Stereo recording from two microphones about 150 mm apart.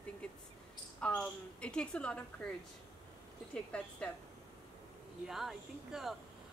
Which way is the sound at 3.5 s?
10° left (ahead or behind).